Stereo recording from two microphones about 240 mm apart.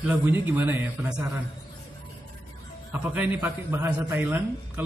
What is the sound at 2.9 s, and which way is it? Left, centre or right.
A man's voice, centre.